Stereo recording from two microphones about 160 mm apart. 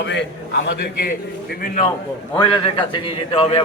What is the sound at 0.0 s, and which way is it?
A man's voice, 90° left.